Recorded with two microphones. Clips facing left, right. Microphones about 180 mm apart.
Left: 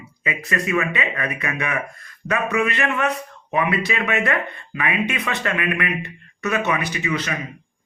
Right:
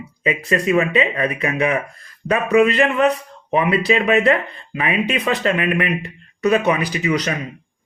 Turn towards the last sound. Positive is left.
turn(degrees=-40)  # may be behind; listen again after turning